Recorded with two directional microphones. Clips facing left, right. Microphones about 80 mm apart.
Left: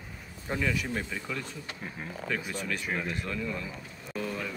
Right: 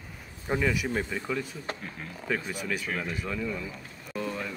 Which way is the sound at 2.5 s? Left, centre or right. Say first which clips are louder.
Right 1 dB; centre.